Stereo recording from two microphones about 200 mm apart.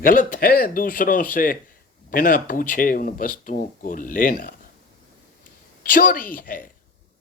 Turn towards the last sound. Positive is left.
turn(degrees=45)  # may be behind; listen again after turning